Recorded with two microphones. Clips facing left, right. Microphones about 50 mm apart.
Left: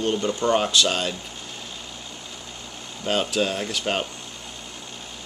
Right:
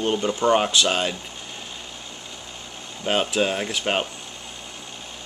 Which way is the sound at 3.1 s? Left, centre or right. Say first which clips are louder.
Right 1 dB; right.